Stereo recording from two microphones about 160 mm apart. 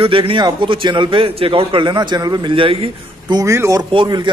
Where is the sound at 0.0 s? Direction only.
35° right (ahead or behind).